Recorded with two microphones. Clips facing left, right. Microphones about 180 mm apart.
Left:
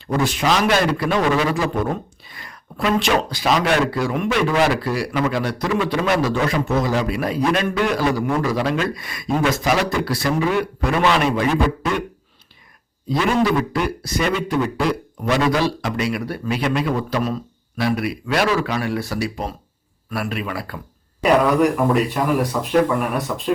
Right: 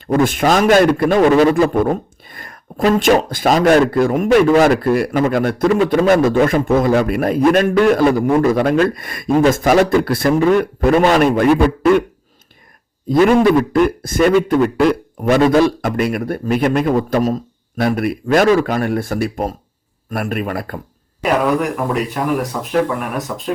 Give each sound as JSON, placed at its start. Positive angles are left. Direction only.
{"t": 0.1, "sound": "a man's voice", "side_deg": -50}
{"t": 13.1, "sound": "a man's voice", "side_deg": -50}
{"t": 21.2, "sound": "speech", "side_deg": 0}